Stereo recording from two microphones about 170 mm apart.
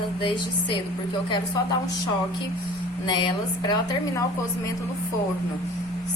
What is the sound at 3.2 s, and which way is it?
A woman's voice, 25° left (ahead or behind).